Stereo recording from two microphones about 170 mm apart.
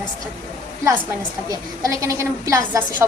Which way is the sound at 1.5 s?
20° right (ahead or behind).